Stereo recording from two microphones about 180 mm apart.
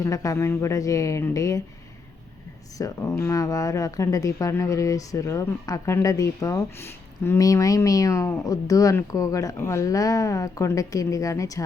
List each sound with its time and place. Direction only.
0.0 s speech: 20° left (ahead or behind)
2.7 s speech: 20° left (ahead or behind)